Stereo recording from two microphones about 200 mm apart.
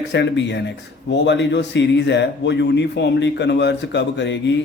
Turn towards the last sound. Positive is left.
turn(degrees=60)  # may be behind; listen again after turning